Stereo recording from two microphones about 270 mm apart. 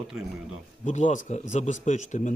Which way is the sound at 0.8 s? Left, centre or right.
Left.